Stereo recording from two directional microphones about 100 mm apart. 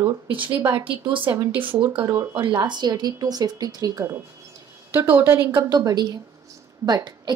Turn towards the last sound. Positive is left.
turn(degrees=-40)  # may be behind; listen again after turning